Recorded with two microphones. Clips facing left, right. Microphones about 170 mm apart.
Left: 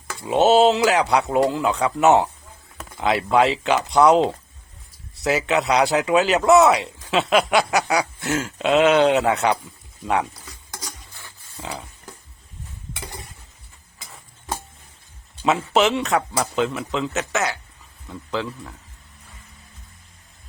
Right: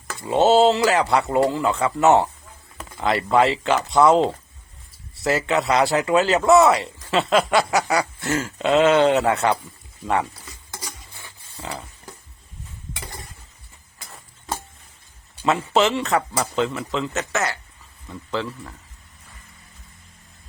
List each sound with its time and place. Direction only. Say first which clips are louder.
0.1 s speech: even; 5° left (ahead or behind)
5.2 s speech: even; centre (ahead or behind)
11.5 s a sound: even; 5° left (ahead or behind)
14.0 s tick-tock: right 1 dB; centre (ahead or behind)
15.7 s speech: even; centre (ahead or behind)